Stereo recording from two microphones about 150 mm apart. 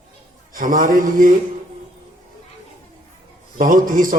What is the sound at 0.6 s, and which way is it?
Speech, 65° right (ahead or behind).